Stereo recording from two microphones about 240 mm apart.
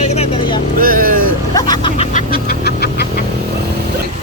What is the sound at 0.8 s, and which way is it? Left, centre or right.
Vehicle, right.